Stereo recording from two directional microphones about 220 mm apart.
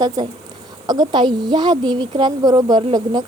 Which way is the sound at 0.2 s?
15° right (ahead or behind).